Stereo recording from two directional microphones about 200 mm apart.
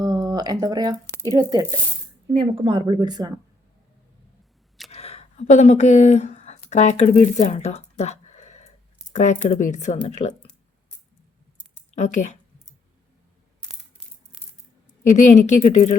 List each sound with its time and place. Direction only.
0.0 s a sound: 20° right (ahead or behind)
1.2 s speech: 20° right (ahead or behind)
4.9 s a sound: 30° left (ahead or behind)
9.6 s speech: 35° left (ahead or behind)
11.9 s speech: 35° left (ahead or behind)
15.0 s speech: 40° left (ahead or behind)